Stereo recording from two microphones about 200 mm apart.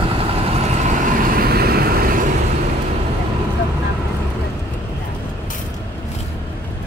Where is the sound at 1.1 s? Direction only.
45° right (ahead or behind).